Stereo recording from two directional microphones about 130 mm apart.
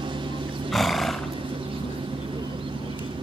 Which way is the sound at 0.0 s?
40° right (ahead or behind).